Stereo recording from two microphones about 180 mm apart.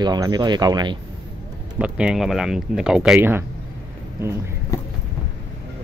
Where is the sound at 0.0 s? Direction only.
25° right (ahead or behind).